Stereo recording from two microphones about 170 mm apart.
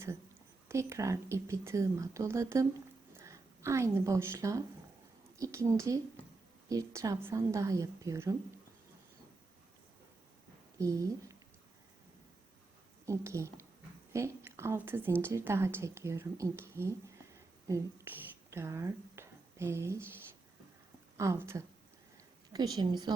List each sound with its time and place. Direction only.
0.7 s a woman's voice: 15° right (ahead or behind)
10.8 s a woman's voice: 20° right (ahead or behind)
13.1 s a woman's voice: 15° right (ahead or behind)
21.2 s a woman's voice: 15° right (ahead or behind)